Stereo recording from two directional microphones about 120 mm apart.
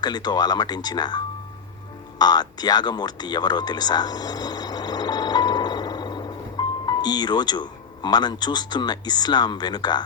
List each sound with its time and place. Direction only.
0.0 s speech: 35° left (ahead or behind)